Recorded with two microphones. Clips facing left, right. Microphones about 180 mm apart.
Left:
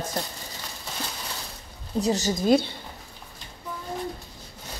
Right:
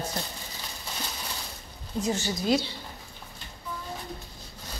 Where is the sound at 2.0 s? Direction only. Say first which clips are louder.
Left 5 dB; 40° left (ahead or behind).